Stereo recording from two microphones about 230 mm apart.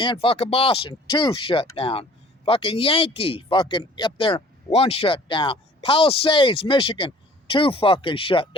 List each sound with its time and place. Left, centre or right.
0.0 s speech: left